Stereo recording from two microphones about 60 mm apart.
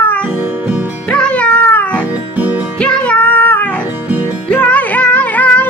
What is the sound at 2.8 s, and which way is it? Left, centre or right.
Female singing, left.